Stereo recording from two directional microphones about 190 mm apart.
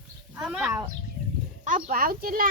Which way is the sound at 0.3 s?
5° right (ahead or behind).